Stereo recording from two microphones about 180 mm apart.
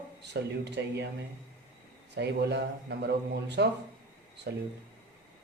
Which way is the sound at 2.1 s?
70° right (ahead or behind).